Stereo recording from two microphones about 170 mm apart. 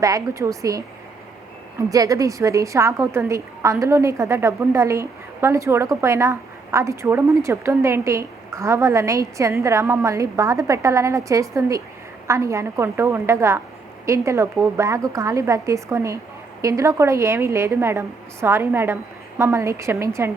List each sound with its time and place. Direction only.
0.0 s a woman's voice: 20° right (ahead or behind)
1.9 s a woman's voice: 20° right (ahead or behind)